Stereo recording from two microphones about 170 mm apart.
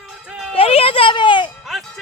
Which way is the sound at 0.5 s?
35° left (ahead or behind).